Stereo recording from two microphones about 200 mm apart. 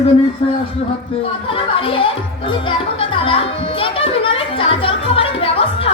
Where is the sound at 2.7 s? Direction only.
25° left (ahead or behind).